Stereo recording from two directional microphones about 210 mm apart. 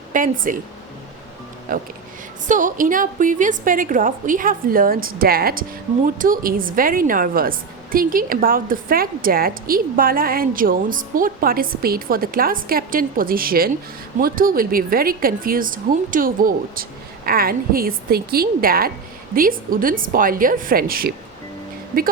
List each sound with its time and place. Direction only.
0.1 s speech: 40° right (ahead or behind)
1.7 s a woman's voice: 40° right (ahead or behind)